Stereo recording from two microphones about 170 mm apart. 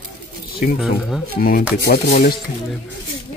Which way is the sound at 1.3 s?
60° left (ahead or behind).